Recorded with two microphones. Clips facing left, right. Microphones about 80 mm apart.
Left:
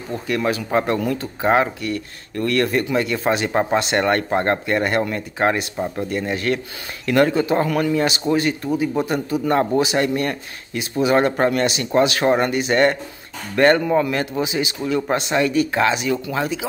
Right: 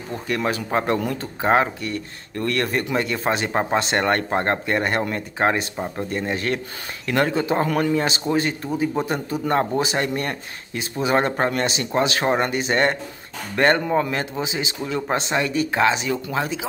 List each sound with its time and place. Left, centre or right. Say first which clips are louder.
0.3 s speech: left 2 dB; right